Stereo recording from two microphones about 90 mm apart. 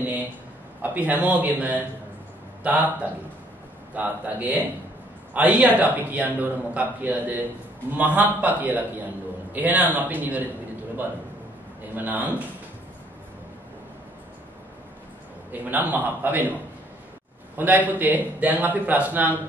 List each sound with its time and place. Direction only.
0.8 s a man's voice: 20° right (ahead or behind)
11.9 s a man's voice: 20° right (ahead or behind)
15.6 s a man's voice: 20° right (ahead or behind)
17.6 s a man's voice: 20° right (ahead or behind)